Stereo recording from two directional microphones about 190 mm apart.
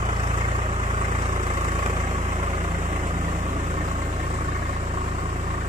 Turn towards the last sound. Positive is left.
turn(degrees=-35)  # may be behind; listen again after turning